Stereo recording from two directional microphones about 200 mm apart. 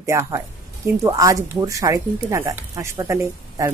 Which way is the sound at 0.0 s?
15° right (ahead or behind).